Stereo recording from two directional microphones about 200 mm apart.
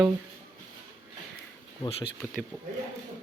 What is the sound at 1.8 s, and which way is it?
Speech, 25° left (ahead or behind).